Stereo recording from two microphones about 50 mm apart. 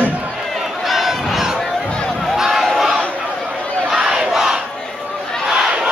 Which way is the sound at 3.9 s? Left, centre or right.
Centre.